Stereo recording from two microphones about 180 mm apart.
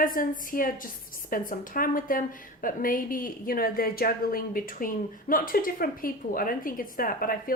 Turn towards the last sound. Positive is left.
turn(degrees=50)  # may be behind; listen again after turning